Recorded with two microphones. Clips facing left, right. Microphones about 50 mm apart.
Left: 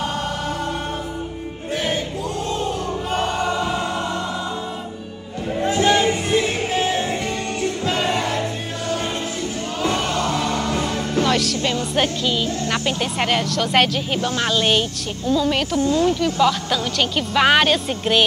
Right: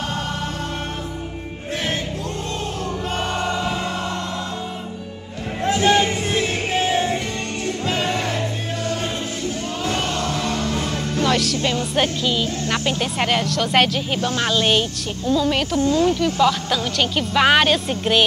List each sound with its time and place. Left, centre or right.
3.2 s choir: centre
5.6 s a sound: centre
5.9 s music: centre
10.2 s music: centre
11.2 s music: centre
11.8 s speech: centre
15.8 s speech: left
16.3 s speech: centre